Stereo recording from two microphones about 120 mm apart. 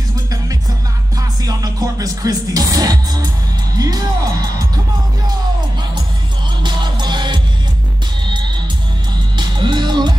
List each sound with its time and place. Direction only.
1.4 s music: 30° right (ahead or behind)
3.7 s speech: 30° right (ahead or behind)
6.6 s music: 40° right (ahead or behind)